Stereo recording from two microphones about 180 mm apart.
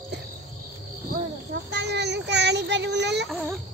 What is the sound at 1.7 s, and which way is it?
Child singing, 70° right (ahead or behind).